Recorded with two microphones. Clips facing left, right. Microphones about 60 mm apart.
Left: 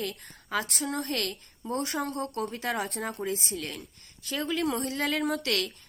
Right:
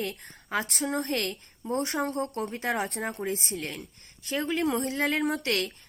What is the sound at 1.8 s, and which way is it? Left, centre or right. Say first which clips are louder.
Speech: right 2 dB; right.